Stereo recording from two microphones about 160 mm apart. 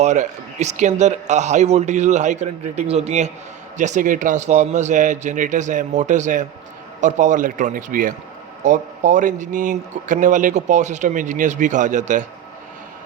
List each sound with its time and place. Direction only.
0.0 s speech: 45° right (ahead or behind)